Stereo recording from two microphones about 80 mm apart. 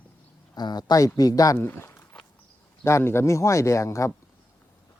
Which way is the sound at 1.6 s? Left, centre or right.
Left.